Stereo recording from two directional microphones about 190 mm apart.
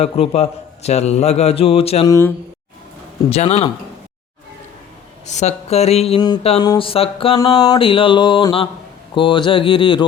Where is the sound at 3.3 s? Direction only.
35° left (ahead or behind).